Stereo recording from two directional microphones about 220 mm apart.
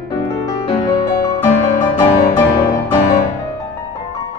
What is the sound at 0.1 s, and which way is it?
Music, 15° left (ahead or behind).